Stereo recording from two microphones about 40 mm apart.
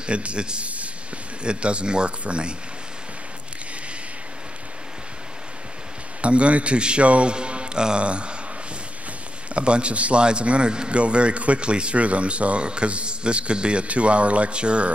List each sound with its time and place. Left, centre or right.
0.0 s a man's voice: right
6.2 s a man's voice: right
9.5 s a man's voice: right